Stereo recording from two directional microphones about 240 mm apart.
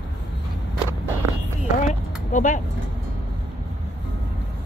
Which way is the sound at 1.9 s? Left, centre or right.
Left.